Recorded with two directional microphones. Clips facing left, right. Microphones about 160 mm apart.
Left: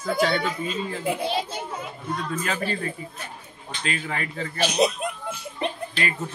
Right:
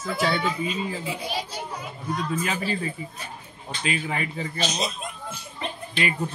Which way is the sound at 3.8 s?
10° right (ahead or behind).